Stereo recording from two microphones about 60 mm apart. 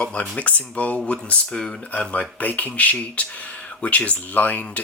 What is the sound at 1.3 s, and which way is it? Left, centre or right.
Speech, centre.